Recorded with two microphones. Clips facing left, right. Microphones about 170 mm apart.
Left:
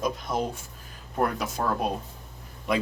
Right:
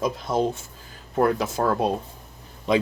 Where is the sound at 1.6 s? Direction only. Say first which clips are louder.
Right 4 dB; 55° right (ahead or behind).